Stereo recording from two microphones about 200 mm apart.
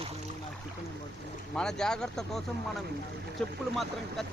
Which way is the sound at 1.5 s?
5° left (ahead or behind).